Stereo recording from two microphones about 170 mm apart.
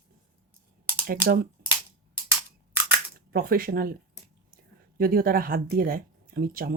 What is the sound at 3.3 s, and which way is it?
Speech, 60° right (ahead or behind).